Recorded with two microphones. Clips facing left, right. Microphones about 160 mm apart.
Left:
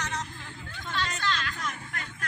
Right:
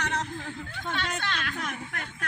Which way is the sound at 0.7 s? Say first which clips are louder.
Even; 55° right (ahead or behind).